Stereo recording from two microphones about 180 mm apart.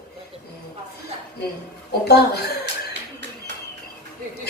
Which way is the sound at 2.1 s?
65° left (ahead or behind).